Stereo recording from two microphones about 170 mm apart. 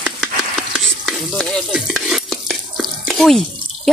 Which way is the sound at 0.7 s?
Centre (ahead or behind).